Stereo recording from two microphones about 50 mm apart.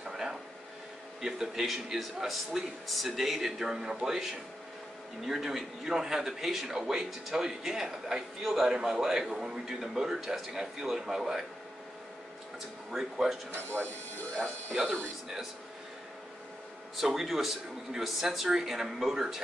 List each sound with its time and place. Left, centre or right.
0.0 s a sound: centre
1.2 s a man's voice: centre
12.9 s a man's voice: centre
13.5 s speech: right
16.9 s speech: centre